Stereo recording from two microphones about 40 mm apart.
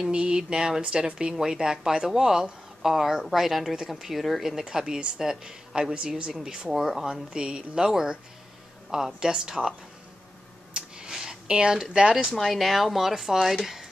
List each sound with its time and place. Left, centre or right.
0.0 s speech: right; by 4.6 s centre
4.6 s speech: centre
6.7 s speech: centre
7.1 s speech: centre
10.7 s a sound: right
11.1 s speech: centre
12.3 s speech: centre